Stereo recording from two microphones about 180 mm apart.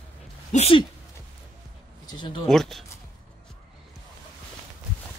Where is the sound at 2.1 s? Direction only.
25° left (ahead or behind).